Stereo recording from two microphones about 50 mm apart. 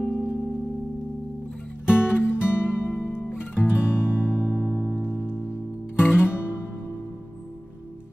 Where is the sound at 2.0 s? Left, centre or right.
Left.